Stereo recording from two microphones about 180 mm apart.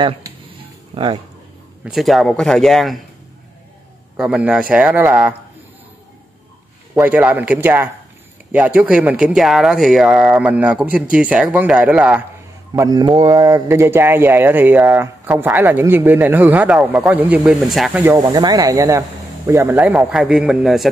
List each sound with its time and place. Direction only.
0.9 s speech: 25° right (ahead or behind)
1.9 s speech: centre (ahead or behind)
4.2 s speech: 5° right (ahead or behind)
7.0 s speech: 10° right (ahead or behind)
12.7 s speech: 20° right (ahead or behind); by 18.0 s centre (ahead or behind)
18.0 s speech: 20° right (ahead or behind); by 20.9 s centre (ahead or behind)